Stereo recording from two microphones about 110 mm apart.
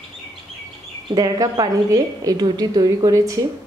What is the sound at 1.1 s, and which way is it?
A woman's voice, 35° right (ahead or behind).